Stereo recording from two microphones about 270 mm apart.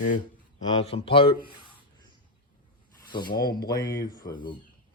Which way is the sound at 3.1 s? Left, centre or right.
Centre.